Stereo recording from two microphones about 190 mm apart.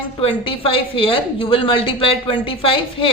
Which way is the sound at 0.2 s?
30° left (ahead or behind).